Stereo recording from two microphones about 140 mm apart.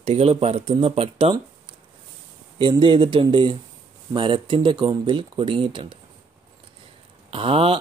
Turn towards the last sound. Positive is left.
turn(degrees=-40)  # may be behind; listen again after turning